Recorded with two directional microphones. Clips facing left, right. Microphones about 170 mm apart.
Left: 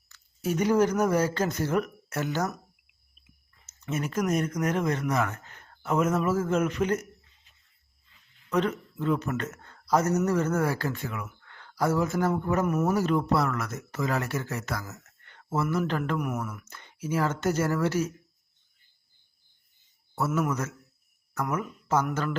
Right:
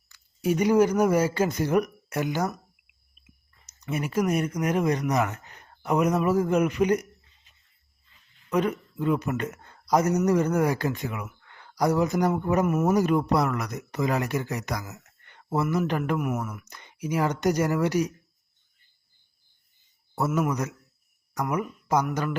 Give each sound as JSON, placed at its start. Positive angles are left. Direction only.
{"t": 0.1, "sound": "speech", "side_deg": -10}
{"t": 3.7, "sound": "speech", "side_deg": -15}
{"t": 8.4, "sound": "speech", "side_deg": -10}
{"t": 16.1, "sound": "speech", "side_deg": -5}
{"t": 20.1, "sound": "speech", "side_deg": -15}